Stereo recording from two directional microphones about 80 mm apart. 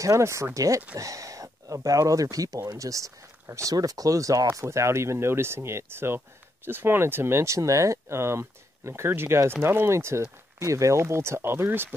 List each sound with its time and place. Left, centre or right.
0.0 s speech: right